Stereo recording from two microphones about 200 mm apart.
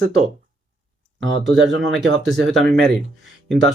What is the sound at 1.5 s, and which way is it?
Speech, 65° right (ahead or behind).